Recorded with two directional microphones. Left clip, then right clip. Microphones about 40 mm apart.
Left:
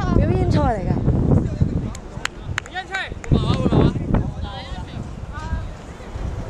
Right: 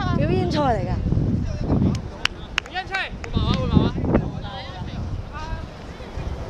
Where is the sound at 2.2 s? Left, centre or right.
Right.